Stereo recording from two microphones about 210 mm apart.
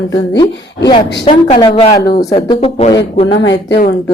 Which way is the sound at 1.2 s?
25° left (ahead or behind).